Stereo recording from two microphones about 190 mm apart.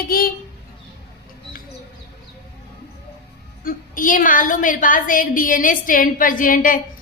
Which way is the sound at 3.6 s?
45° left (ahead or behind).